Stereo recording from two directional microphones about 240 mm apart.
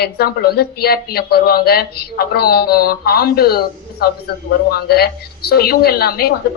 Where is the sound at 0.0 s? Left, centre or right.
Left.